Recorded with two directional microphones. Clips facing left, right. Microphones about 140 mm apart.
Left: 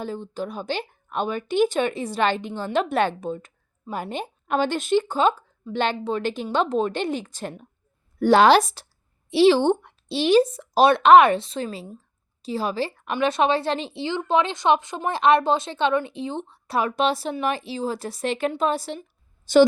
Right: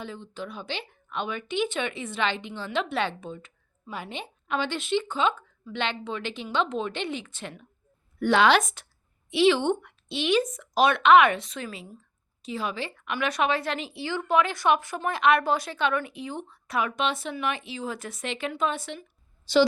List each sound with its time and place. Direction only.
0.0 s a woman's voice: 40° left (ahead or behind)